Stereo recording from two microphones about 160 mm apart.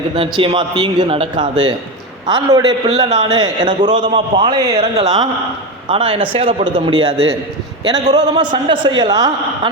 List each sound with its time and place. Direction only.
0.2 s a man's voice: 35° right (ahead or behind)
4.7 s speech: 40° right (ahead or behind)
5.0 s a man's voice: 25° right (ahead or behind)